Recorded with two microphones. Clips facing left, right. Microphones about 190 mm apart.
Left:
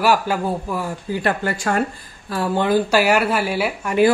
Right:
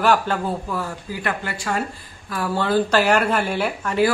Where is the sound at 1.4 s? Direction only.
50° left (ahead or behind).